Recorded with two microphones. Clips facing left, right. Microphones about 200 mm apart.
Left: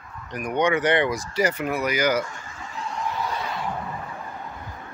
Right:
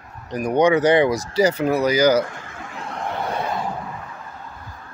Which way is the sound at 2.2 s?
60° right (ahead or behind).